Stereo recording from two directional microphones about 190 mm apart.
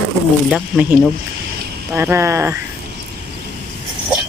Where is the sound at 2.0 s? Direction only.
15° right (ahead or behind).